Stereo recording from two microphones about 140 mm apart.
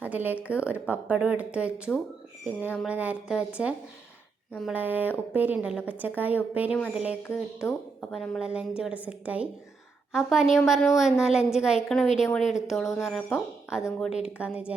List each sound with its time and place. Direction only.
0.0 s speech: 10° right (ahead or behind)
7.2 s speech: 20° left (ahead or behind)
8.1 s a woman's voice: centre (ahead or behind)
12.5 s speech: 55° left (ahead or behind)
12.7 s a woman's voice: centre (ahead or behind)